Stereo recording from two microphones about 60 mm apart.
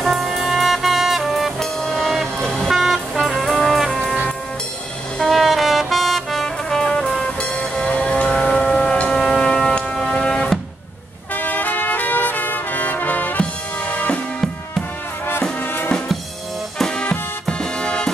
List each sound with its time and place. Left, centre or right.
0.0 s brass instrument: centre
2.4 s music: centre
5.2 s brass instrument: centre
7.2 s music: centre
11.3 s brass instrument: left
15.6 s music: left
16.7 s music: centre